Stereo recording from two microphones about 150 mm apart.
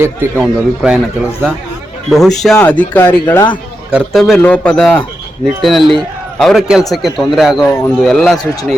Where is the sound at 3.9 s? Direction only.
5° right (ahead or behind).